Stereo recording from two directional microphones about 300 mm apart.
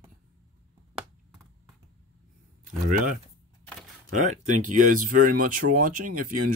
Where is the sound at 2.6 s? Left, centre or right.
Right.